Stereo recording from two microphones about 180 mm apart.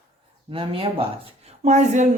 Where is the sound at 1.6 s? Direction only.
40° right (ahead or behind).